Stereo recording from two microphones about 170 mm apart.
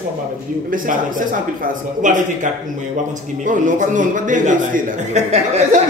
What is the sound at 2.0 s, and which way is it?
Speech, 50° right (ahead or behind).